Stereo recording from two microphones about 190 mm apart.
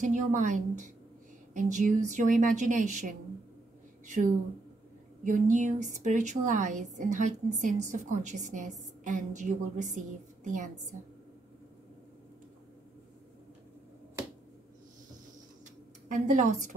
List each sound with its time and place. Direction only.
0.0 s a woman's voice: 40° right (ahead or behind)
5.2 s a woman's voice: 40° right (ahead or behind)
16.1 s a woman's voice: 40° right (ahead or behind)